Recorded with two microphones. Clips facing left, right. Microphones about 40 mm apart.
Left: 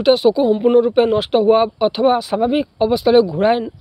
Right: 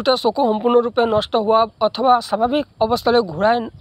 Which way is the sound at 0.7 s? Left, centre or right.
Centre.